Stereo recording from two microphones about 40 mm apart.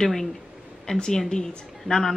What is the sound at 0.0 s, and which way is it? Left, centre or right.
Speech, centre.